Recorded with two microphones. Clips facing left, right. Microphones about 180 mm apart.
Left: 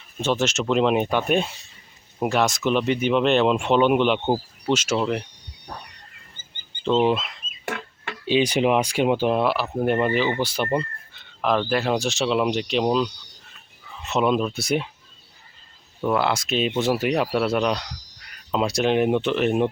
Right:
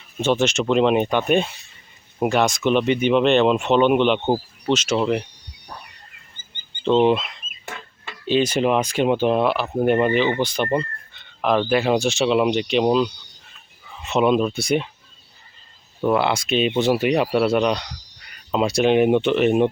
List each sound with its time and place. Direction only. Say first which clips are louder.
0.2 s speech: right 3 dB; centre (ahead or behind)
4.9 s speech: right 3 dB; 5° right (ahead or behind)
6.8 s speech: right 3 dB; 5° left (ahead or behind)
7.6 s a sound: left 6 dB; 85° left
8.3 s speech: right 1 dB; 15° left (ahead or behind)
16.0 s speech: right 3 dB; 5° right (ahead or behind)